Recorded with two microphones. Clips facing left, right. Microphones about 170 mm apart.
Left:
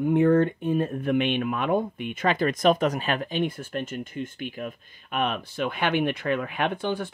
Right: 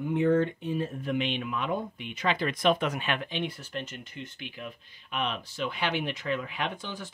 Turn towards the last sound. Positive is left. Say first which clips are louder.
# left 8 dB
turn(degrees=55)  # may be behind; listen again after turning